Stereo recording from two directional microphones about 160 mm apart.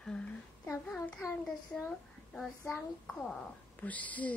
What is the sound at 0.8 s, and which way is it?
A child's voice, 10° left (ahead or behind).